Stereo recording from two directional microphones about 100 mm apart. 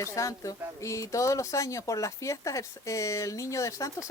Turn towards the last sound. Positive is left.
turn(degrees=30)  # may be behind; listen again after turning